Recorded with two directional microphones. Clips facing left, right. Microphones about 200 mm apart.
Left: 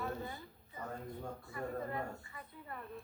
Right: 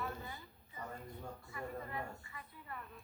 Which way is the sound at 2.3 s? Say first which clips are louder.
Left 2 dB; 35° left (ahead or behind).